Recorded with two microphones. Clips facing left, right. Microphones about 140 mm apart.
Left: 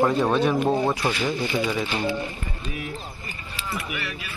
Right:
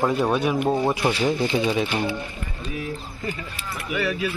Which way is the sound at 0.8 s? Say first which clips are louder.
Right 3 dB; 20° right (ahead or behind).